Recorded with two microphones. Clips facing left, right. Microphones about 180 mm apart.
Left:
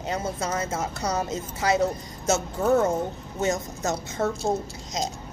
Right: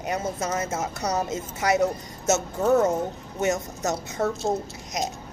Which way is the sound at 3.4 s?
20° right (ahead or behind).